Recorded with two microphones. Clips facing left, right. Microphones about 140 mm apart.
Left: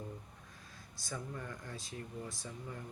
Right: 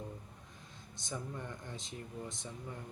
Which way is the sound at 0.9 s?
20° right (ahead or behind).